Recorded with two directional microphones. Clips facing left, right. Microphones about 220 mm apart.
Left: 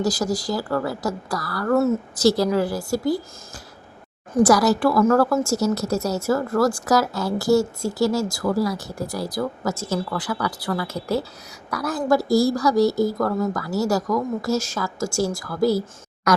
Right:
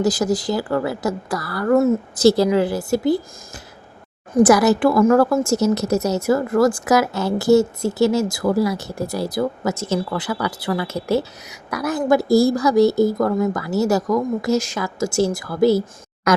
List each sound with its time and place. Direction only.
0.0 s speech: 20° right (ahead or behind)
1.7 s a woman's voice: 10° right (ahead or behind)
2.2 s speech: 25° right (ahead or behind)